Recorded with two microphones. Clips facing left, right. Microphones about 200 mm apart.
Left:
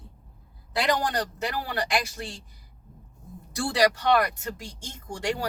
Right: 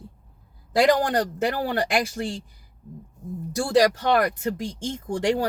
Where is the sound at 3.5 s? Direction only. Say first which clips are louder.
Right 4 dB; 45° right (ahead or behind).